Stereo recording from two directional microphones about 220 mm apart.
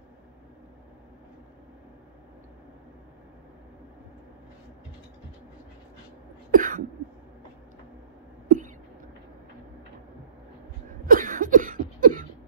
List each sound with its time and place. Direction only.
6.5 s cough: 35° right (ahead or behind)
8.5 s a sound: 35° right (ahead or behind)
11.1 s cough: 35° right (ahead or behind)